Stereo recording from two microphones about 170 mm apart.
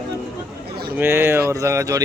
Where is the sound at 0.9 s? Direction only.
10° right (ahead or behind).